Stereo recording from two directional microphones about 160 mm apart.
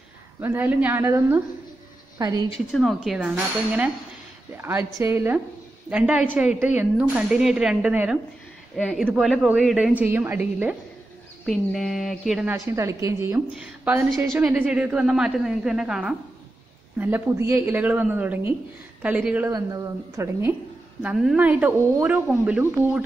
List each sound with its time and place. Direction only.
0.4 s a woman's voice: 15° right (ahead or behind)
2.7 s a woman's voice: centre (ahead or behind)
4.6 s a woman's voice: 15° right (ahead or behind)
5.9 s a woman's voice: 5° right (ahead or behind)
11.4 s a woman's voice: centre (ahead or behind)
12.5 s a woman's voice: 20° right (ahead or behind)
19.5 s a woman's voice: 20° right (ahead or behind)
21.0 s a woman's voice: 5° right (ahead or behind)